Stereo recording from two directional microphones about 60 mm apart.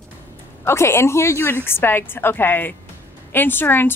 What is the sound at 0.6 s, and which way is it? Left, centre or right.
A woman's voice, left.